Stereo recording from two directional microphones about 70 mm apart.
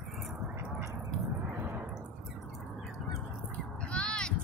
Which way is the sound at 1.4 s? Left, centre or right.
Right.